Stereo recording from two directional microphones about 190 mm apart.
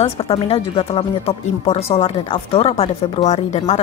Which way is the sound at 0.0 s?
30° left (ahead or behind).